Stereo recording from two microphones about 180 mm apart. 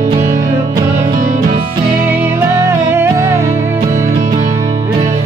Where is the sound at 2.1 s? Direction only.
15° right (ahead or behind).